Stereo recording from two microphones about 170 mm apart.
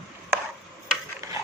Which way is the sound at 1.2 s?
20° right (ahead or behind).